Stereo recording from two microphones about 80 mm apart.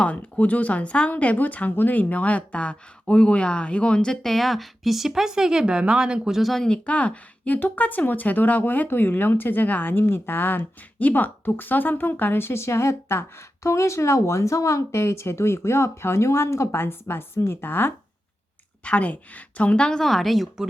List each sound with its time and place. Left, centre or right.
0.0 s a woman's voice: centre